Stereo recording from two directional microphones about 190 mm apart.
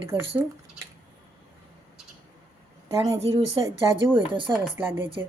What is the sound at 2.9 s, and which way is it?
A woman's voice, 20° right (ahead or behind).